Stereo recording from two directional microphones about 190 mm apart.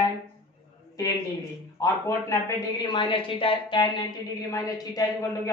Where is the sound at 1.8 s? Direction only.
15° left (ahead or behind).